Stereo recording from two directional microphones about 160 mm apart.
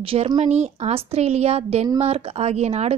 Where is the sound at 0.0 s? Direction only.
35° right (ahead or behind).